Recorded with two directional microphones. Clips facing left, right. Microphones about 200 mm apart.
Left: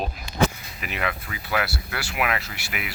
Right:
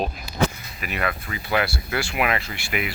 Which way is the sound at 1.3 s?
5° left (ahead or behind).